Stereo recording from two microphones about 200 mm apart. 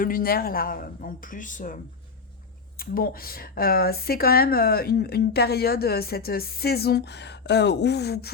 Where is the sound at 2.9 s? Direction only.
45° left (ahead or behind).